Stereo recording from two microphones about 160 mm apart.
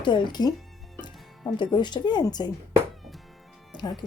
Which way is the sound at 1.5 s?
30° left (ahead or behind).